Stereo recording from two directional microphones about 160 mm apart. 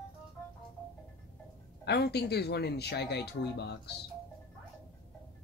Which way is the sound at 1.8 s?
90° left.